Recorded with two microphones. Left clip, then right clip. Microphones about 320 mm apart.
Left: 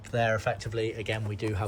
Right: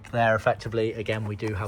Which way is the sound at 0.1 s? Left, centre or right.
Centre.